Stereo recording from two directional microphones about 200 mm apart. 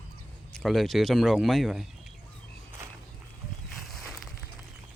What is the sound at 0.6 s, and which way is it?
Speech, centre (ahead or behind).